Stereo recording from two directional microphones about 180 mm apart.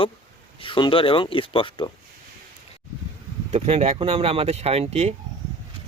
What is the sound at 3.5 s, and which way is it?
Speech, 35° right (ahead or behind).